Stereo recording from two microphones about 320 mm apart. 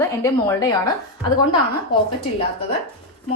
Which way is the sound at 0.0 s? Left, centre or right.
Centre.